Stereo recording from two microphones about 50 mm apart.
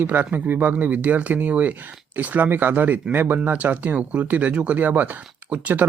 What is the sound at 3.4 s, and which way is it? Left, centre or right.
Speech, right.